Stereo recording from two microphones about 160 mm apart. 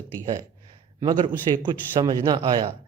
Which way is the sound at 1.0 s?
30° right (ahead or behind).